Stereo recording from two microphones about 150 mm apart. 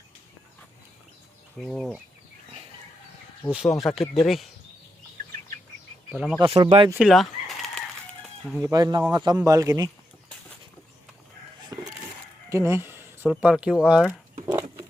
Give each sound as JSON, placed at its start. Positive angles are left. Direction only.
{"t": 1.6, "sound": "speech", "side_deg": 0}
{"t": 3.5, "sound": "speech", "side_deg": 0}
{"t": 6.1, "sound": "speech", "side_deg": 0}
{"t": 6.6, "sound": "speech", "side_deg": -30}
{"t": 7.1, "sound": "chicken", "side_deg": 0}
{"t": 8.6, "sound": "speech", "side_deg": -25}
{"t": 11.7, "sound": "music", "side_deg": -25}
{"t": 12.5, "sound": "a sound", "side_deg": -20}
{"t": 13.4, "sound": "speech", "side_deg": -5}
{"t": 14.4, "sound": "a sound", "side_deg": -25}